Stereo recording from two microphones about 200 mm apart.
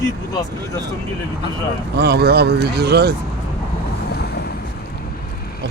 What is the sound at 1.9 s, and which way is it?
Speech, 55° right (ahead or behind).